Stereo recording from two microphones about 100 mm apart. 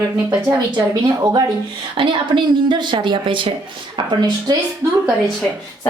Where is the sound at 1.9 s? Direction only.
55° right (ahead or behind).